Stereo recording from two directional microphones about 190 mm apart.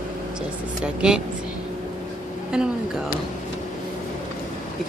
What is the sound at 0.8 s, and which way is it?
Speech, 5° right (ahead or behind).